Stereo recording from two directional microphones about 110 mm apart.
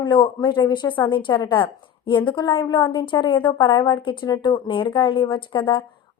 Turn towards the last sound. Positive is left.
turn(degrees=45)  # may be behind; listen again after turning